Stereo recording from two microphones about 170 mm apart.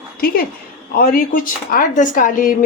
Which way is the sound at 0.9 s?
55° left (ahead or behind).